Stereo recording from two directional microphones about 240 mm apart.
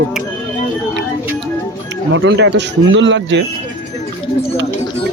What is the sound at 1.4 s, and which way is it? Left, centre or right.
Speech, right.